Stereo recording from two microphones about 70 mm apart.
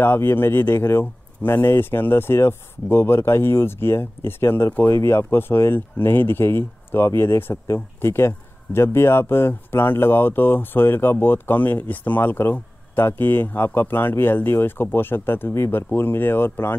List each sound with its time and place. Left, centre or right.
0.0 s speech: left